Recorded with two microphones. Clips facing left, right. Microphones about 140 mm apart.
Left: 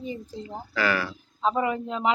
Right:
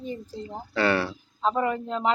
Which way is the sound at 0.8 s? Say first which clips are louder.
Right 3 dB; 30° right (ahead or behind).